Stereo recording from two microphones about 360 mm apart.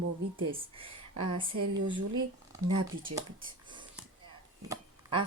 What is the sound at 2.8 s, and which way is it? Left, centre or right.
Speech, centre.